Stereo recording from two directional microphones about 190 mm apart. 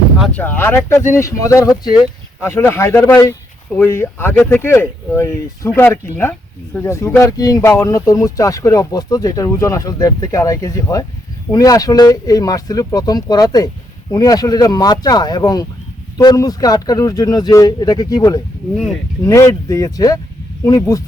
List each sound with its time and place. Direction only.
0.2 s speech: 5° left (ahead or behind)